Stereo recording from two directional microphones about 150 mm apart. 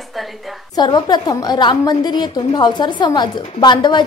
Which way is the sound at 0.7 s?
30° left (ahead or behind).